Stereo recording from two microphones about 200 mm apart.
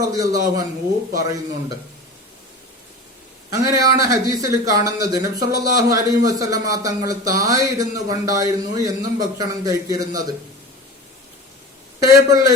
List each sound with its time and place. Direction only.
0.1 s a man's voice: 15° right (ahead or behind)
3.5 s a man's voice: 15° right (ahead or behind)
12.0 s a man's voice: 15° right (ahead or behind)